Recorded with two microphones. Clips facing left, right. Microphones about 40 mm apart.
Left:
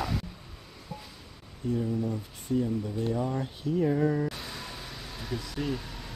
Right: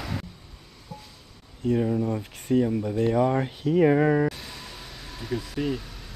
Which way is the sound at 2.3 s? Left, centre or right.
Right.